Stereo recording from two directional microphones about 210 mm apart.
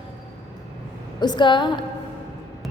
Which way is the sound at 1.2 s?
20° left (ahead or behind).